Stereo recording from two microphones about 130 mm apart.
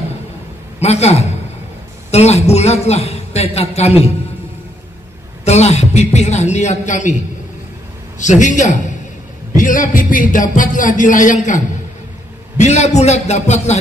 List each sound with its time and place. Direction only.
0.7 s a man's voice: 55° left (ahead or behind)
5.4 s a man's voice: 55° left (ahead or behind)
8.2 s a man's voice: 70° left (ahead or behind)
9.6 s speech: 90° left
12.5 s a man's voice: 60° left (ahead or behind)